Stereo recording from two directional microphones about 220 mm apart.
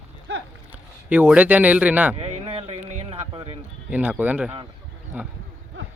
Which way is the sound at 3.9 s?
5° right (ahead or behind).